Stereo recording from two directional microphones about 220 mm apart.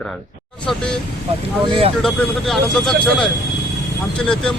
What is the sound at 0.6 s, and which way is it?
Speech, 5° left (ahead or behind).